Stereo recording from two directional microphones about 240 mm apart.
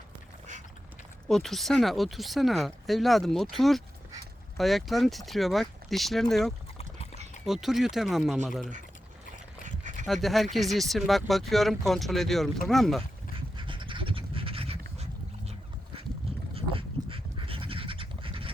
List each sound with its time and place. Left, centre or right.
1.3 s speech: centre
6.7 s dog: left
7.4 s speech: centre
9.6 s a sound: right
10.1 s speech: centre
13.6 s dog: right
16.6 s dog: right